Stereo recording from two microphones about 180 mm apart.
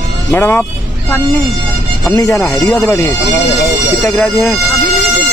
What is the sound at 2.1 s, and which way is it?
Speech, 15° left (ahead or behind).